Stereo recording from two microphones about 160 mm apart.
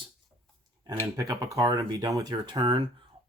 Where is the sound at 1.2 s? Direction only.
25° right (ahead or behind).